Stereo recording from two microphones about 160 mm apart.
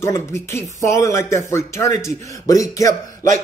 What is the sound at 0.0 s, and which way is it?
A man's voice, 15° left (ahead or behind).